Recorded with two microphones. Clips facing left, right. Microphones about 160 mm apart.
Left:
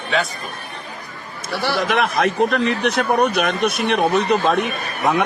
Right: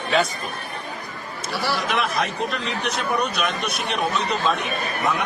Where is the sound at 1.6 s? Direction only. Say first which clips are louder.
Left 5 dB; 55° left (ahead or behind).